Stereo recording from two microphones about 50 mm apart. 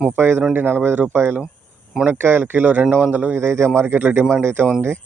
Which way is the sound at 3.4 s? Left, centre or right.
Right.